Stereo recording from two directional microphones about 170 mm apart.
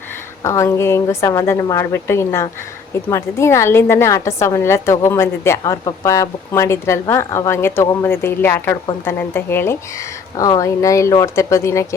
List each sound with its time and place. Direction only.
0.4 s a woman's voice: 15° left (ahead or behind)